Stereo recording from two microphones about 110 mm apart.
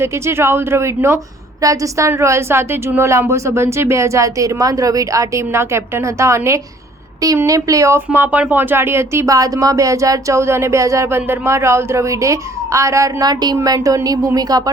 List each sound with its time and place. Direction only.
0.0 s speech: 20° right (ahead or behind)